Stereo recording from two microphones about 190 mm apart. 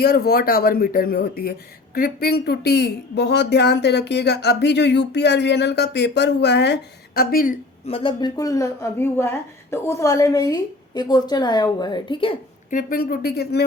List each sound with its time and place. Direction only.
0.0 s speech: 55° left (ahead or behind)
7.9 s a woman's voice: 30° left (ahead or behind)
12.7 s speech: 50° left (ahead or behind)